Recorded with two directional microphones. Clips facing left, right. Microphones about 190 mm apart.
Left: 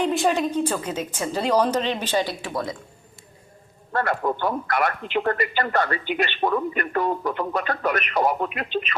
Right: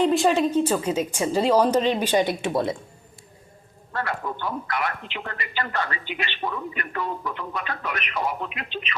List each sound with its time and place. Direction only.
0.0 s a woman's voice: centre (ahead or behind); by 2.7 s 25° right (ahead or behind)
3.9 s a man's voice: 50° left (ahead or behind)